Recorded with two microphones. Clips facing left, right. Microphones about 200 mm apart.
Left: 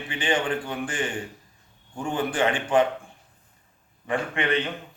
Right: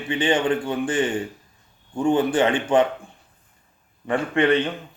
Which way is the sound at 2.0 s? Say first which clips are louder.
Right 6 dB; 25° right (ahead or behind).